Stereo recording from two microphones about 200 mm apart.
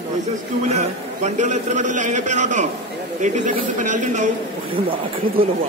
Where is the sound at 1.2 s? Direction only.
35° right (ahead or behind).